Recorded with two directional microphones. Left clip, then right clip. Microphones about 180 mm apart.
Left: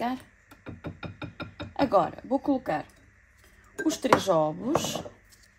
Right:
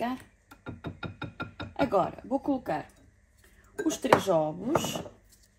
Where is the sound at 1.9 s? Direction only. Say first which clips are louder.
Left 4 dB; 55° left (ahead or behind).